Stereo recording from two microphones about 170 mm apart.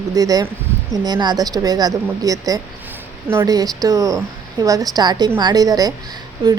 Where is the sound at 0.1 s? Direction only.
20° right (ahead or behind).